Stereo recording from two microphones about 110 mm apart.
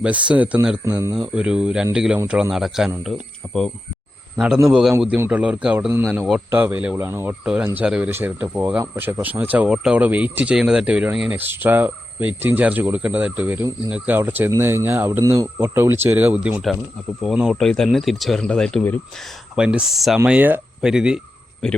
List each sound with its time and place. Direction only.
0.0 s speech: 10° right (ahead or behind)
5.0 s speech: 15° right (ahead or behind)
5.9 s speech: 20° right (ahead or behind)
15.2 s speech: 35° right (ahead or behind)
15.5 s speech: 20° right (ahead or behind)
17.5 s speech: 5° left (ahead or behind)
19.5 s speech: 10° right (ahead or behind)
20.2 s speech: 15° right (ahead or behind)